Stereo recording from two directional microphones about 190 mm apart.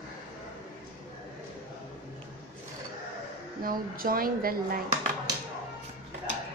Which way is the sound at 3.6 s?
50° right (ahead or behind).